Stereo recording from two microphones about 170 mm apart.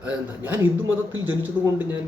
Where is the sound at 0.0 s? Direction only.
10° right (ahead or behind).